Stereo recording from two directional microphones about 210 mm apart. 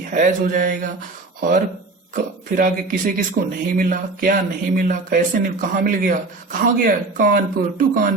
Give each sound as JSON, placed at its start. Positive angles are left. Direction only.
{"t": 0.1, "sound": "speech", "side_deg": -40}